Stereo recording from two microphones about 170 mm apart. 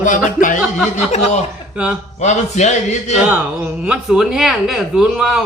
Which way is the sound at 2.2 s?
45° left (ahead or behind).